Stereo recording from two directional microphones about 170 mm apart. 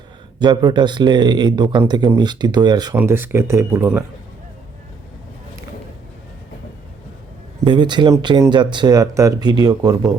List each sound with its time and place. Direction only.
0.3 s speech: 25° right (ahead or behind)
2.9 s speech: 10° right (ahead or behind)
7.6 s speech: 25° right (ahead or behind)